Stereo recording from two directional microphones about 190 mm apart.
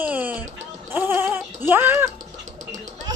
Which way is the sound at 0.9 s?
10° right (ahead or behind).